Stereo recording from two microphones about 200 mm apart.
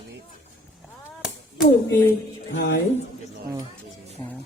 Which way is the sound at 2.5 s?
65° left (ahead or behind).